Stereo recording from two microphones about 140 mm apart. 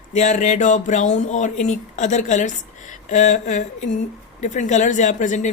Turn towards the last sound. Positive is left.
turn(degrees=60)  # may be behind; listen again after turning